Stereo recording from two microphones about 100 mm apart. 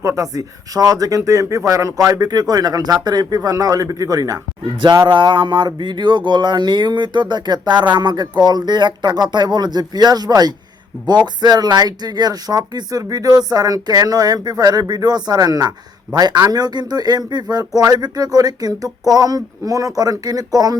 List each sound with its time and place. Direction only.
0.0 s speech: 30° right (ahead or behind)
5.0 s speech: 55° right (ahead or behind); by 20.7 s 40° right (ahead or behind)